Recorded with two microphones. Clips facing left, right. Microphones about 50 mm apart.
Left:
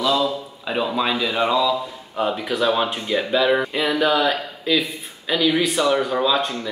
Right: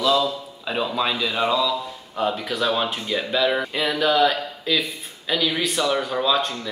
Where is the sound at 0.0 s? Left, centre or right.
Centre.